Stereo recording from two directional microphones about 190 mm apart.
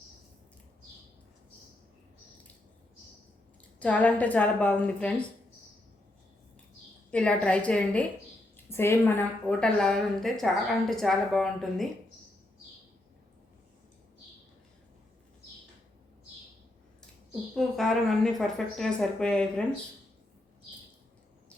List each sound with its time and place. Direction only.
3.8 s a woman's voice: 10° left (ahead or behind)
7.1 s a woman's voice: 5° left (ahead or behind)
17.5 s a woman's voice: centre (ahead or behind)